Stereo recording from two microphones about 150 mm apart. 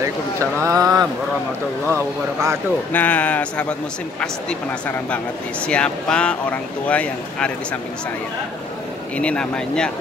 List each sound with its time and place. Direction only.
0.0 s speech: 20° right (ahead or behind)
2.9 s speech: 10° left (ahead or behind)
9.1 s speech: 5° left (ahead or behind)